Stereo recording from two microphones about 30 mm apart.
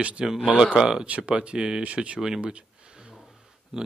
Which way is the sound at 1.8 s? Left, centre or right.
Right.